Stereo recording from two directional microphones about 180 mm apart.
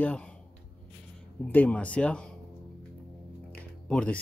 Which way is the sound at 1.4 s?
10° left (ahead or behind).